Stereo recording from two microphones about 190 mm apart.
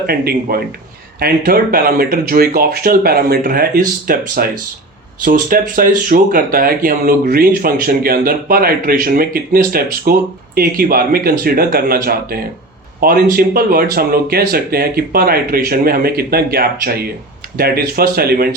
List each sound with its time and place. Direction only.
0.0 s speech: 55° right (ahead or behind)